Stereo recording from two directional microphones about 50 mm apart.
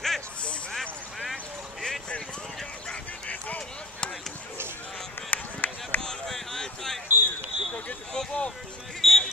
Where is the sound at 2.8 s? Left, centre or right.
Centre.